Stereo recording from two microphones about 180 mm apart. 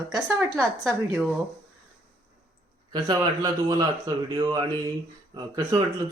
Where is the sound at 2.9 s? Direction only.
25° right (ahead or behind).